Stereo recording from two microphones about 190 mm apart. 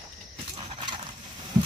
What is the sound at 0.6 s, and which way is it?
Horse, 25° right (ahead or behind).